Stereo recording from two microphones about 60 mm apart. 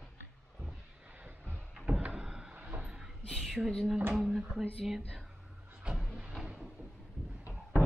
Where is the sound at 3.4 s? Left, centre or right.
Centre.